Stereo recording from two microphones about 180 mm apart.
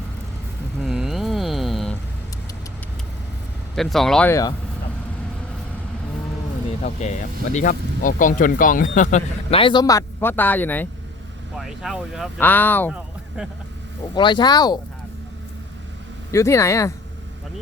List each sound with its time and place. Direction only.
0.8 s a sound: centre (ahead or behind)
3.8 s speech: centre (ahead or behind)
4.3 s speech: 20° left (ahead or behind)
6.8 s speech: 40° left (ahead or behind)
9.6 s speech: 25° left (ahead or behind); by 10.8 s 10° left (ahead or behind)
11.5 s speech: centre (ahead or behind)
12.4 s speech: 10° left (ahead or behind)
12.9 s a sound: 5° right (ahead or behind)
14.2 s speech: 25° left (ahead or behind)
16.3 s speech: 15° left (ahead or behind)